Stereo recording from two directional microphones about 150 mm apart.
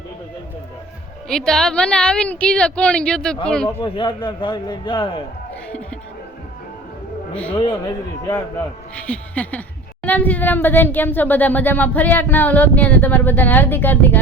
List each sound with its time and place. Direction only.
1.3 s a man's voice: 5° left (ahead or behind)
3.8 s a man's voice: 35° left (ahead or behind)
7.7 s a man's voice: 20° left (ahead or behind)
9.0 s speech: 10° left (ahead or behind)